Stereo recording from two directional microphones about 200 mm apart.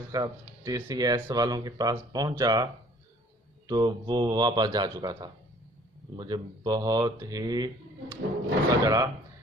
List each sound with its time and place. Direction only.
0.1 s speech: 20° right (ahead or behind)
3.7 s speech: 20° right (ahead or behind)
8.7 s speech: 15° right (ahead or behind)